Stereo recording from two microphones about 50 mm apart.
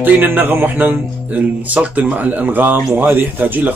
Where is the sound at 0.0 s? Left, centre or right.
Right.